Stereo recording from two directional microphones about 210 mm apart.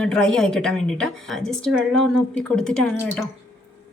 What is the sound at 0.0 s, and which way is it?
A woman's voice, 5° left (ahead or behind).